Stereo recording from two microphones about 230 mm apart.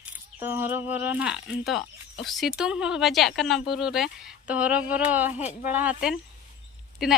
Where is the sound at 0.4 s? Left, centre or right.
Centre.